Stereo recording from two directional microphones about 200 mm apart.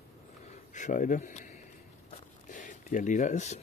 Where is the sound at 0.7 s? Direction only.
40° left (ahead or behind).